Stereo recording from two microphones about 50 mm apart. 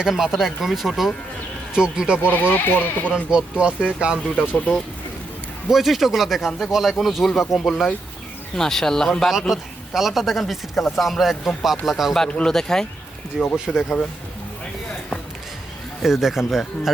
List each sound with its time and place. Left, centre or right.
0.0 s speech: centre
1.7 s speech: centre
2.2 s speech: left
3.3 s speech: centre
4.4 s speech: left
5.6 s speech: centre
9.5 s speech: centre
12.5 s speech: centre
13.3 s speech: centre
16.0 s speech: centre